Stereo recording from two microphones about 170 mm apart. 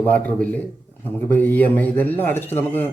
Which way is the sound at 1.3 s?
10° left (ahead or behind).